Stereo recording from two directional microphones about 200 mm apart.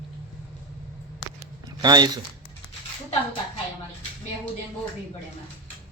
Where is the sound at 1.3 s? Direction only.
20° right (ahead or behind).